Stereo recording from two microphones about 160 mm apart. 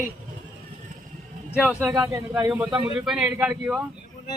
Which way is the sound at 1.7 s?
10° right (ahead or behind).